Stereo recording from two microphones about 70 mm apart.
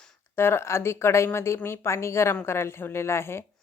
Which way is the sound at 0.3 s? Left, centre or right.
Left.